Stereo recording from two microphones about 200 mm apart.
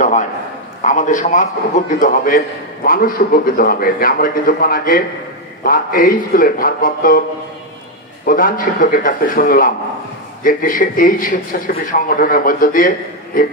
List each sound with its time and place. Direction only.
0.0 s a sound: 40° left (ahead or behind)
0.8 s a man's voice: 40° left (ahead or behind)
8.3 s a man's voice: 45° left (ahead or behind)